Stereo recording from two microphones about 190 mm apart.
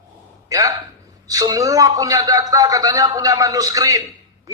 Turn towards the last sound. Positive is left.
turn(degrees=-15)  # may be behind; listen again after turning